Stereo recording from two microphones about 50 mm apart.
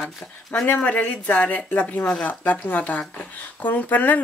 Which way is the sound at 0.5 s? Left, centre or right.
Left.